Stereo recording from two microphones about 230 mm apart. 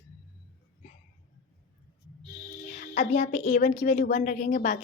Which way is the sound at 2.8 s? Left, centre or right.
Left.